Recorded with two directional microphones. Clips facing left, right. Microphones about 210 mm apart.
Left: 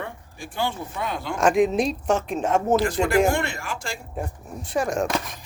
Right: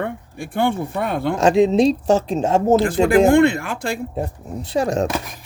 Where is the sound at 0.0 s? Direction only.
60° right (ahead or behind).